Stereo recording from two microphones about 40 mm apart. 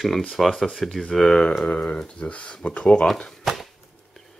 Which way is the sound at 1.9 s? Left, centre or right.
Left.